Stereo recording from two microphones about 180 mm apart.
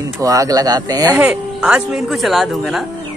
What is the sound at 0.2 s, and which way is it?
Speech, 20° right (ahead or behind).